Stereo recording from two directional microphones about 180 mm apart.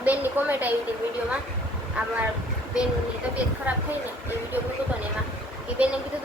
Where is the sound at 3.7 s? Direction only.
10° right (ahead or behind).